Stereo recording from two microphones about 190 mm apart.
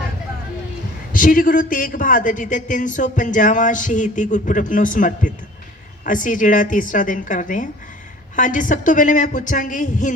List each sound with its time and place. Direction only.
1.1 s a man's voice: 45° left (ahead or behind)